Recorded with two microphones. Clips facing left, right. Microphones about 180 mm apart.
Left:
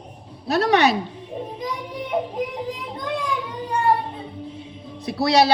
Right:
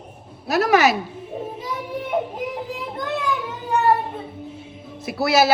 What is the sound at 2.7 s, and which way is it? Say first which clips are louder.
Children playing: right 1 dB; 5° right (ahead or behind).